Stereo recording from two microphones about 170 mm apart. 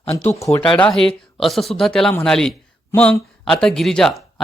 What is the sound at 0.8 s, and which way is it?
Speech, 5° left (ahead or behind).